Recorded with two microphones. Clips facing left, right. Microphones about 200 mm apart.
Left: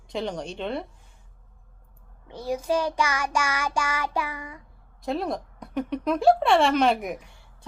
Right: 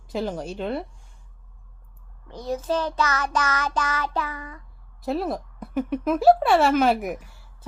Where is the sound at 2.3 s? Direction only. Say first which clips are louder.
Even; 10° left (ahead or behind).